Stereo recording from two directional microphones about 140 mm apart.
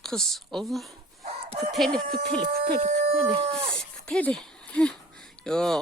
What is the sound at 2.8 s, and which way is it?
Speech, 50° right (ahead or behind).